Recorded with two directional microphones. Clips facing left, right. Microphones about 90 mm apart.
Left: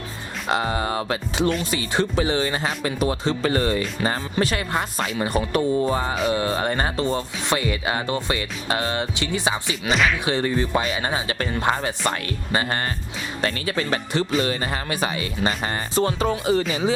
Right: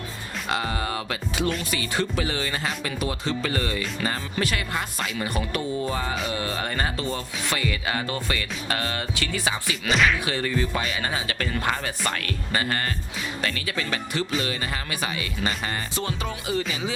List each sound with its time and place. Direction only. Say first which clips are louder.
0.4 s speech: left 5 dB; 25° left (ahead or behind)
9.9 s speech: left 1 dB; centre (ahead or behind)
10.2 s speech: left 4 dB; 25° left (ahead or behind)